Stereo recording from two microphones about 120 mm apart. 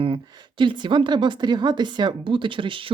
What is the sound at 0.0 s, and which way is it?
A woman's voice, 40° right (ahead or behind).